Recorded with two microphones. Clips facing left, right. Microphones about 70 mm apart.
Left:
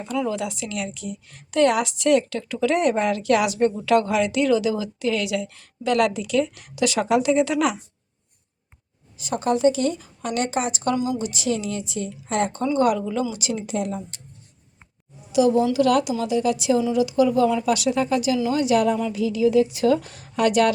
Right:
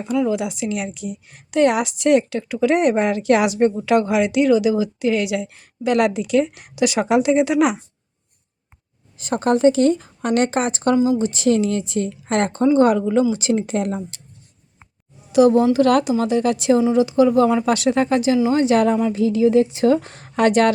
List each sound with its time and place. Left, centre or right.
0.0 s a woman's voice: centre
9.1 s a woman's voice: right
10.9 s a woman's voice: right
12.6 s a woman's voice: right
15.3 s a woman's voice: right